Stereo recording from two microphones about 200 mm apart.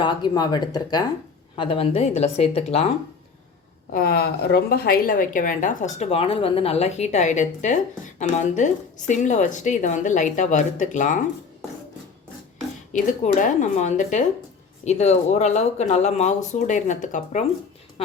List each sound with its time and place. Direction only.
0.0 s a woman's voice: 20° left (ahead or behind)
3.9 s a woman's voice: 50° left (ahead or behind)
12.9 s a woman's voice: 40° left (ahead or behind)